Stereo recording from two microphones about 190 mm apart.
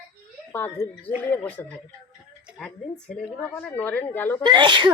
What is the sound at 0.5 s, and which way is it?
A woman's voice, 10° left (ahead or behind).